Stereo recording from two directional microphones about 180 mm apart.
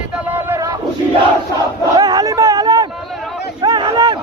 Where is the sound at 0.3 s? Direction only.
10° right (ahead or behind).